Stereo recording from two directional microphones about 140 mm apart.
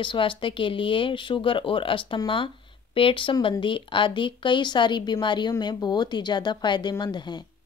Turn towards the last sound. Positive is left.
turn(degrees=30)  # may be behind; listen again after turning